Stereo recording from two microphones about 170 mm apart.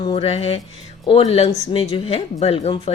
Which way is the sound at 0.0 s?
35° left (ahead or behind).